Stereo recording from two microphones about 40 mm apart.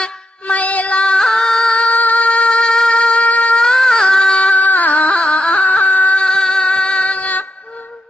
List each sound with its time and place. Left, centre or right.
0.4 s music: left
0.9 s music: left
1.2 s music: centre
1.7 s music: left
2.0 s music: left
2.5 s wind instrument: centre; by 3.5 s left
3.5 s a sound: centre
4.5 s a sound: left
6.1 s a sound: centre
6.7 s music: left